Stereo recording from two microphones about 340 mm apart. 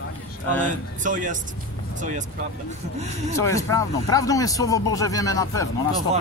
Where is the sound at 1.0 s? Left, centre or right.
Right.